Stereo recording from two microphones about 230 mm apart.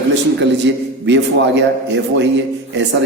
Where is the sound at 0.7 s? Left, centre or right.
Right.